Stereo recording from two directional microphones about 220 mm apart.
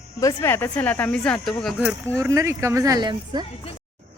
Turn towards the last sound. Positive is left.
turn(degrees=-20)  # may be behind; listen again after turning